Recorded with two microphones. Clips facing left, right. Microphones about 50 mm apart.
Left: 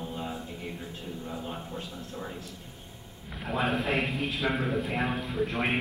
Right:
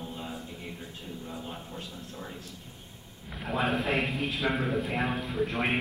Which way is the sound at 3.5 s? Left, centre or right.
Centre.